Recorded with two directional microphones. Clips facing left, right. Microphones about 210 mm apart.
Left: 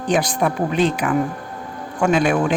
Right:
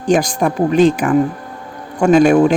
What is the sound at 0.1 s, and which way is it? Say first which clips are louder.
Speech: right 5 dB; 45° right (ahead or behind).